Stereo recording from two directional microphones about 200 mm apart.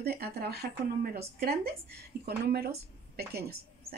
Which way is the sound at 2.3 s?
50° right (ahead or behind).